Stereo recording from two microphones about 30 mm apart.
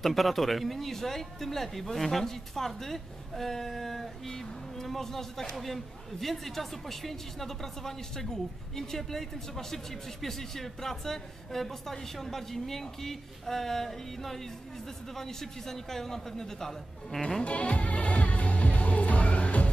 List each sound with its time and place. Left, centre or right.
0.0 s speech: centre
17.4 s music: left